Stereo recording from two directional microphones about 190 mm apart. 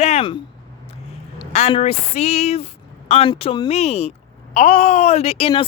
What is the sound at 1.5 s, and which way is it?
A woman's voice, 35° left (ahead or behind).